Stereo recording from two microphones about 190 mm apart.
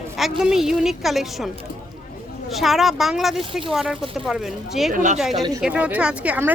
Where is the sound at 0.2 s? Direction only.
Centre (ahead or behind).